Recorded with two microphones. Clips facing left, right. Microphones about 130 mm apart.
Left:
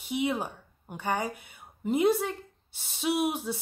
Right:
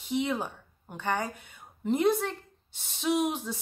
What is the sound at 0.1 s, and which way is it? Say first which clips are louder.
A woman's voice: even; 10° left (ahead or behind).